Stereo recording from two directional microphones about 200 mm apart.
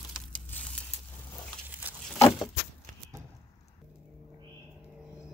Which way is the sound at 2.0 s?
Centre (ahead or behind).